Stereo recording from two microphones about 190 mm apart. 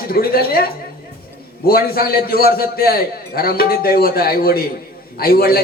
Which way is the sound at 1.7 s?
50° left (ahead or behind).